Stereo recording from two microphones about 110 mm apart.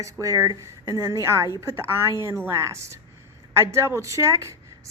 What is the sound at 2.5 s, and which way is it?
A woman's voice, 25° right (ahead or behind).